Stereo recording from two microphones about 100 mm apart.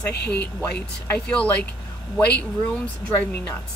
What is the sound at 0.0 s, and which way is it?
Speech, 15° left (ahead or behind).